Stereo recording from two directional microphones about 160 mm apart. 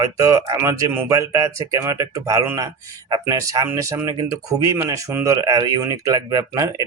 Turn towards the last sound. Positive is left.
turn(degrees=-20)  # may be behind; listen again after turning